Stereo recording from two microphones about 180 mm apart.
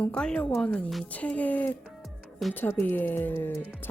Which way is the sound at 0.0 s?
5° left (ahead or behind).